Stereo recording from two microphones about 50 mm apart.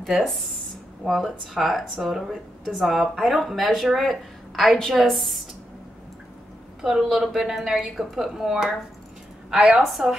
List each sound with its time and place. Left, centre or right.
0.0 s speech: centre
6.8 s a woman's voice: centre
9.8 s speech: centre